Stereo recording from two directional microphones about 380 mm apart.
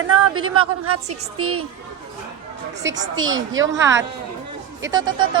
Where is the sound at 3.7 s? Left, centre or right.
Centre.